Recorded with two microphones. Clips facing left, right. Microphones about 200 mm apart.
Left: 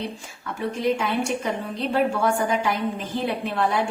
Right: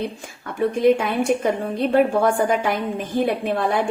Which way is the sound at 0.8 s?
55° right (ahead or behind).